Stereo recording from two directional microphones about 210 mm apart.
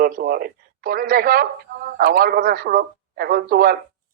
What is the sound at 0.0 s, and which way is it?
A man's voice, 45° right (ahead or behind).